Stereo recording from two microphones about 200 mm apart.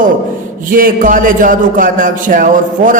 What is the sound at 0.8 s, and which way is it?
A man's voice, 45° right (ahead or behind).